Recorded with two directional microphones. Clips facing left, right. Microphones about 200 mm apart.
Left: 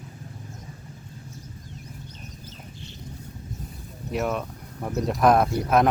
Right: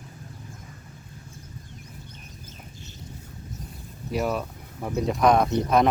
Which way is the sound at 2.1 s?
50° right (ahead or behind).